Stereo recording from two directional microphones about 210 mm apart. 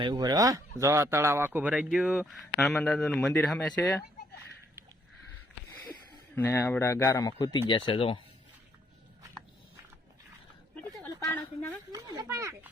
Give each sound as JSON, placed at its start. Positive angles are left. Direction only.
{"t": 0.0, "sound": "speech", "side_deg": -20}
{"t": 6.3, "sound": "speech", "side_deg": 10}
{"t": 11.0, "sound": "a sound", "side_deg": 10}
{"t": 11.9, "sound": "speech", "side_deg": -20}